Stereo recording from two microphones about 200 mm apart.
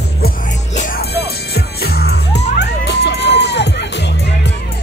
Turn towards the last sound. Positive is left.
turn(degrees=60)  # may be behind; listen again after turning